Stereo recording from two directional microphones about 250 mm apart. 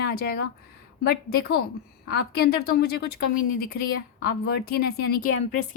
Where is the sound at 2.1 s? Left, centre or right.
Left.